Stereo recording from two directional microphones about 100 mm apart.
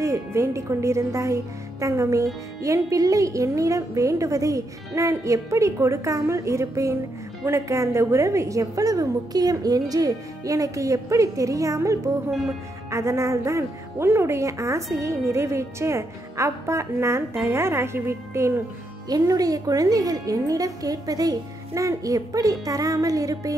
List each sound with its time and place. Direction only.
0.0 s a woman's voice: 30° right (ahead or behind)
12.3 s music: centre (ahead or behind)
12.9 s a woman's voice: 30° right (ahead or behind)
19.0 s a woman's voice: 40° right (ahead or behind)